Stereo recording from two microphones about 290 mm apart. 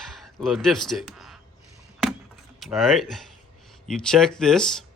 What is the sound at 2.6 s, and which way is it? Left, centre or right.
Speech, centre.